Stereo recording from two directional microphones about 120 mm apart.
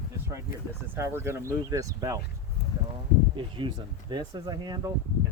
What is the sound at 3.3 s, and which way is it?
Speech, 45° right (ahead or behind).